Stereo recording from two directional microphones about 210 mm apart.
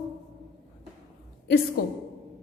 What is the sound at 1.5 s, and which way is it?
Speech, 45° left (ahead or behind).